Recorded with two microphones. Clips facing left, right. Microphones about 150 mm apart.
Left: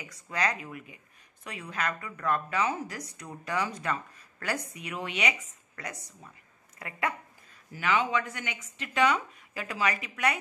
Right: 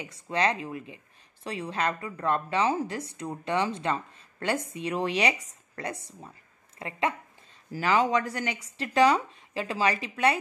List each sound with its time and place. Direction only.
0.0 s speech: 25° right (ahead or behind)
7.7 s speech: 35° right (ahead or behind)